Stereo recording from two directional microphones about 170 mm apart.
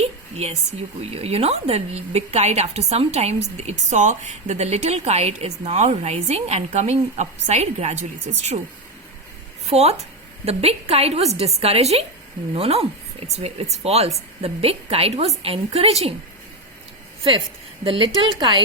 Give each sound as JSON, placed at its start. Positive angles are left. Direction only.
{"t": 0.0, "sound": "a sound", "side_deg": -40}
{"t": 1.1, "sound": "a woman's voice", "side_deg": -35}
{"t": 9.6, "sound": "a woman's voice", "side_deg": -40}
{"t": 17.8, "sound": "speech", "side_deg": -30}